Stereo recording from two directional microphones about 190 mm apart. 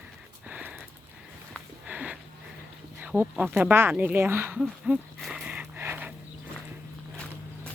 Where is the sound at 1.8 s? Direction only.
5° right (ahead or behind).